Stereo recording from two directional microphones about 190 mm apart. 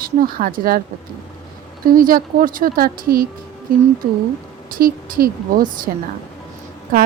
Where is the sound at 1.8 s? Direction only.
45° right (ahead or behind).